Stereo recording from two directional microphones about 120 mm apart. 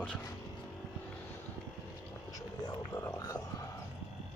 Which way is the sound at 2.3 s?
30° left (ahead or behind).